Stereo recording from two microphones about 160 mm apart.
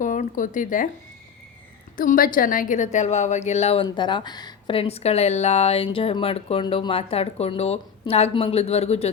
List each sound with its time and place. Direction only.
0.0 s speech: 55° left (ahead or behind)
2.0 s a woman's voice: 60° left (ahead or behind); by 3.8 s 40° left (ahead or behind)
3.8 s speech: 30° left (ahead or behind)